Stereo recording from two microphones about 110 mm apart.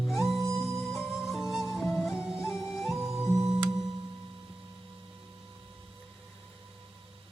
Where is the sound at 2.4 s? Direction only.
25° left (ahead or behind).